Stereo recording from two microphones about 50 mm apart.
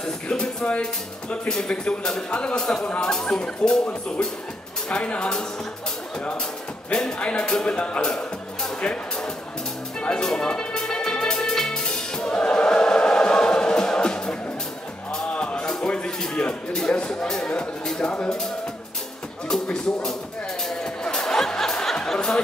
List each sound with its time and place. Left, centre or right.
0.0 s speech: centre
4.8 s speech: left
6.9 s speech: centre
7.2 s speech: left
9.9 s music: centre
15.3 s music: centre
16.9 s speech: centre
19.4 s music: centre